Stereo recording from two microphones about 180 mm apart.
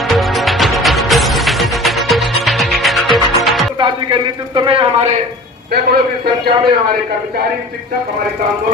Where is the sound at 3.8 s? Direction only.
25° right (ahead or behind).